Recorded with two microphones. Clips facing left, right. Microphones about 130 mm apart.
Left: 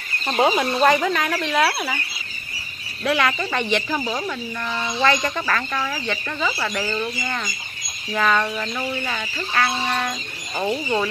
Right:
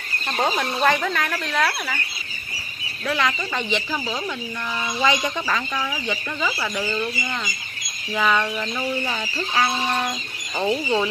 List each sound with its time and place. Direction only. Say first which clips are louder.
0.4 s speech: left 4 dB; 10° left (ahead or behind)
3.1 s speech: left 3 dB; 10° left (ahead or behind)
4.9 s speech: left 1 dB; 10° right (ahead or behind)
5.8 s speech: left 1 dB; centre (ahead or behind)
9.0 s speech: right 1 dB; 15° right (ahead or behind)
10.6 s speech: right 1 dB; centre (ahead or behind)